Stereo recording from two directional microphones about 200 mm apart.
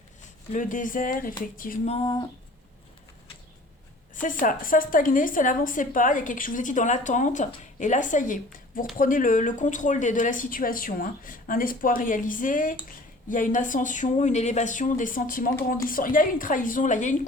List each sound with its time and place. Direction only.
0.5 s speech: 40° left (ahead or behind)
1.9 s speech: 25° left (ahead or behind)
4.1 s a woman's voice: 40° left (ahead or behind)